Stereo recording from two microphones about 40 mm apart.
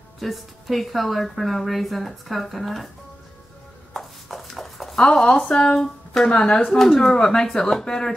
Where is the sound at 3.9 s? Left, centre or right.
Centre.